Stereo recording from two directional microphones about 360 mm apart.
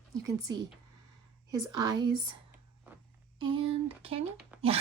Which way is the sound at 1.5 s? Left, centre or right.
Right.